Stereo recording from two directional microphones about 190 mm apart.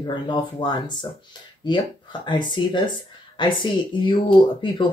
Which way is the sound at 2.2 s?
25° left (ahead or behind).